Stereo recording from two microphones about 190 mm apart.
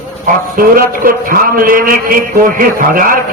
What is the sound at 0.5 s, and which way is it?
A man's voice, 50° right (ahead or behind).